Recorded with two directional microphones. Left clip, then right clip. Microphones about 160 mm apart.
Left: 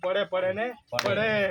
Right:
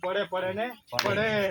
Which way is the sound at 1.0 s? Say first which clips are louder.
Left 1 dB; 35° left (ahead or behind).